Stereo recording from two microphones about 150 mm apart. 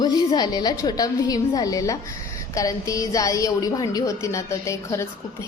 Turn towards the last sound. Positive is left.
turn(degrees=20)  # may be behind; listen again after turning